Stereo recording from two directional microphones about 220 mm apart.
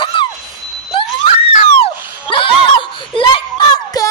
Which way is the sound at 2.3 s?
25° left (ahead or behind).